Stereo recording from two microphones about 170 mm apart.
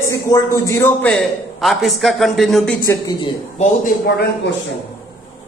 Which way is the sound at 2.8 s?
20° left (ahead or behind).